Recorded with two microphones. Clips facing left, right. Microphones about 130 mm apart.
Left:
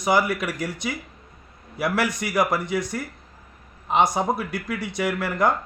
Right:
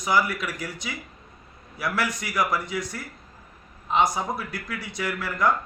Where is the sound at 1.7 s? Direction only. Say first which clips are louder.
Left 4 dB; 65° left (ahead or behind).